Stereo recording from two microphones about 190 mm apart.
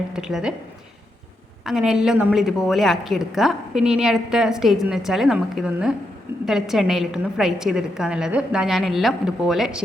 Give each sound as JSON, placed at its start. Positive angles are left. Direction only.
{"t": 0.1, "sound": "a woman's voice", "side_deg": 0}
{"t": 1.6, "sound": "a woman's voice", "side_deg": 0}